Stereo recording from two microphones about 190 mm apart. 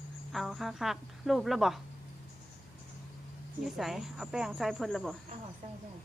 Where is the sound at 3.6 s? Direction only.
Centre (ahead or behind).